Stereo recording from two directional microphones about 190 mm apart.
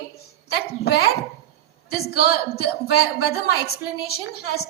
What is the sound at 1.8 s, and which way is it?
A woman's voice, 55° left (ahead or behind).